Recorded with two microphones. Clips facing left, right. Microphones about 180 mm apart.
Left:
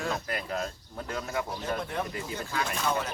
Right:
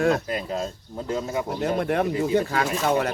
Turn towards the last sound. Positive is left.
turn(degrees=-65)  # may be behind; listen again after turning